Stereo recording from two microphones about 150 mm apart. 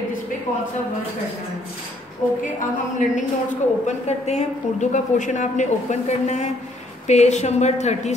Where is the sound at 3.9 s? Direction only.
45° left (ahead or behind).